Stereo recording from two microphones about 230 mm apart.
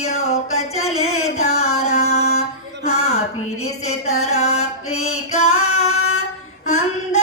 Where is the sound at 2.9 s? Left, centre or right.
Left.